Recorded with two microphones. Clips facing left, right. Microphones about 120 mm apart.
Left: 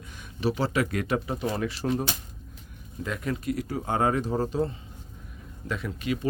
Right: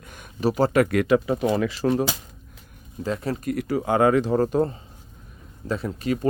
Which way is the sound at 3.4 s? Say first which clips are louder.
Right 3 dB; 55° right (ahead or behind).